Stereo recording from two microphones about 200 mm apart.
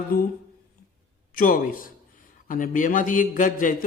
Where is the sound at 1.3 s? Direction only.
45° left (ahead or behind).